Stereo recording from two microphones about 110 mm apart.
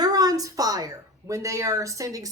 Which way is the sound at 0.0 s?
35° right (ahead or behind).